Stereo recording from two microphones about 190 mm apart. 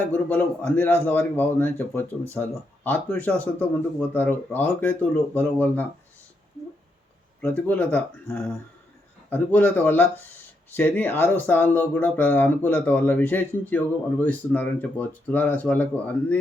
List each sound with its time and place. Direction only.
0.1 s speech: 5° left (ahead or behind)
7.4 s speech: 5° left (ahead or behind)